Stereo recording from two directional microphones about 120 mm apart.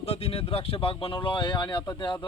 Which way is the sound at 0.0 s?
55° left (ahead or behind).